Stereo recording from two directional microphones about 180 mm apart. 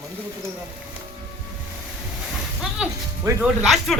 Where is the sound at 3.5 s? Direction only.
Centre (ahead or behind).